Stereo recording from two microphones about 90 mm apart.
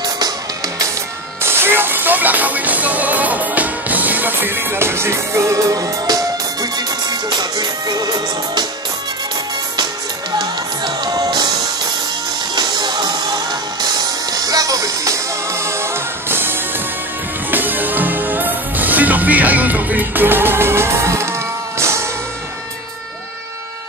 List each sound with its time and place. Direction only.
1.4 s music: 25° right (ahead or behind); by 8.1 s 50° right (ahead or behind)
10.4 s music: 50° right (ahead or behind)
12.5 s music: 55° right (ahead or behind); by 22.0 s 30° right (ahead or behind)